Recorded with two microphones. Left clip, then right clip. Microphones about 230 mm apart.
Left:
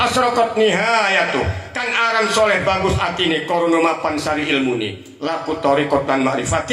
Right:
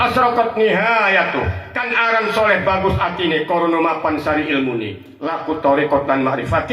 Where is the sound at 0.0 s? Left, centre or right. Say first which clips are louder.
Right 1 dB; left.